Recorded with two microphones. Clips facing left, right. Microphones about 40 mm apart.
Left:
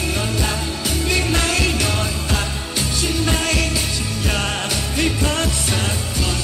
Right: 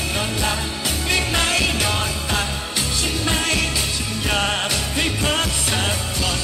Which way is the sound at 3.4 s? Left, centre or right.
Right.